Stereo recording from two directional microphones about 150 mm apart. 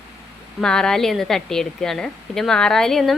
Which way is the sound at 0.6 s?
5° left (ahead or behind).